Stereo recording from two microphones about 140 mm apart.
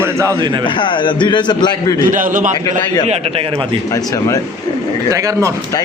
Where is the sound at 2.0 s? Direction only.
70° right (ahead or behind).